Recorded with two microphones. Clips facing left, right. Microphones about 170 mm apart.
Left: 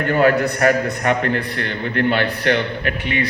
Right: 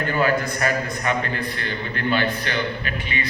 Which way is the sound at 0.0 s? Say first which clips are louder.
Left 6 dB; 65° left (ahead or behind).